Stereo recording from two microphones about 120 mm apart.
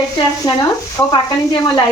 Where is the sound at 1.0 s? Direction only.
30° left (ahead or behind).